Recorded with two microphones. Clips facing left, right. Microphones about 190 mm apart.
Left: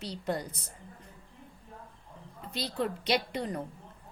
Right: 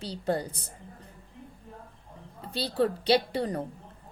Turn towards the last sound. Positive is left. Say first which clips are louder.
# right 5 dB
turn(degrees=-35)  # may be behind; listen again after turning